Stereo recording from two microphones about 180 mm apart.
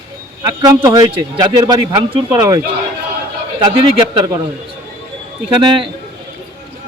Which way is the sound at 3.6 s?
25° right (ahead or behind).